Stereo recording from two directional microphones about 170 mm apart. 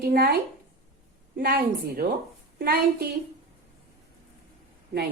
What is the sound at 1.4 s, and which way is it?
Speech, 65° right (ahead or behind).